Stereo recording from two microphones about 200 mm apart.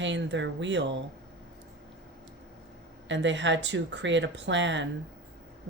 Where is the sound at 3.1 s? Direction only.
65° right (ahead or behind).